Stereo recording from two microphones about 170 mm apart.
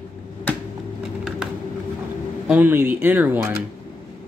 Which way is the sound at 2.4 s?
10° right (ahead or behind).